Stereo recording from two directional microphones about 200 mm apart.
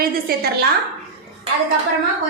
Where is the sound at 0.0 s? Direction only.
50° right (ahead or behind).